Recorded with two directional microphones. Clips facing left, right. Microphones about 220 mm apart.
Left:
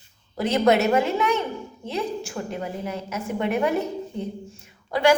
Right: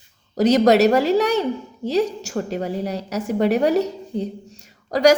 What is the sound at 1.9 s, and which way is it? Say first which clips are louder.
Speech: right 8 dB; 75° right (ahead or behind).